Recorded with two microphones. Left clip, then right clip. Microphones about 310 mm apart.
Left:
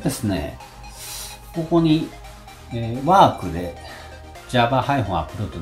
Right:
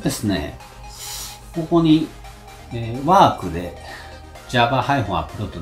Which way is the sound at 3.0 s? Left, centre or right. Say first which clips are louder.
Right 1 dB; centre.